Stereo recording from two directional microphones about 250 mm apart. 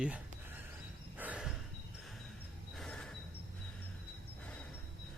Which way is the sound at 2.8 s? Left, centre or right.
Centre.